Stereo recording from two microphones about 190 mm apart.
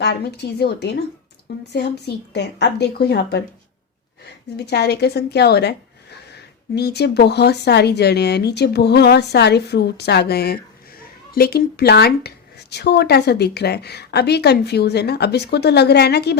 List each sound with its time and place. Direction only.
0.0 s a woman's voice: 60° left (ahead or behind)
4.6 s a woman's voice: 60° left (ahead or behind)